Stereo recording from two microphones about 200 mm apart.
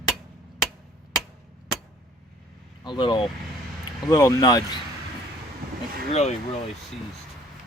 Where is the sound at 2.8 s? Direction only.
25° left (ahead or behind).